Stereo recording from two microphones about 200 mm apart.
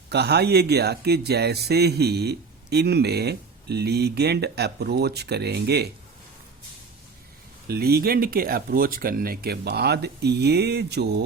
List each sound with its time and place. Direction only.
0.1 s speech: 55° right (ahead or behind)
7.7 s speech: 50° right (ahead or behind)